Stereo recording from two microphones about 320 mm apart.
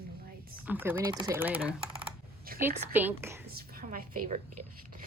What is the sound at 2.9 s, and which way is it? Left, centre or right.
Speech, centre.